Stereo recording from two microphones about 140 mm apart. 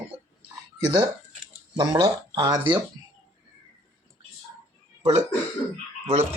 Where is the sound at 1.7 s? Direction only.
25° right (ahead or behind).